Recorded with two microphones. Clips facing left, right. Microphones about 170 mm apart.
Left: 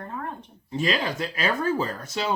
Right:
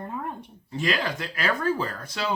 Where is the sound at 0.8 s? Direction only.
25° left (ahead or behind).